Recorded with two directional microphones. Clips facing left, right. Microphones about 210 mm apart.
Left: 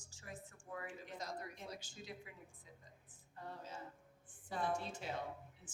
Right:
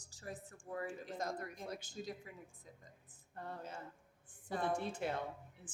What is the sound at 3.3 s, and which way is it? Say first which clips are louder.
A woman's voice: right 3 dB; 60° right (ahead or behind).